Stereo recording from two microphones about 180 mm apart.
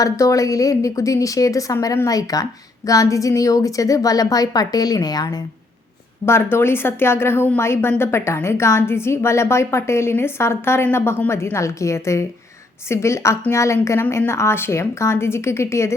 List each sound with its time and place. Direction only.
0.0 s a woman's voice: 20° left (ahead or behind)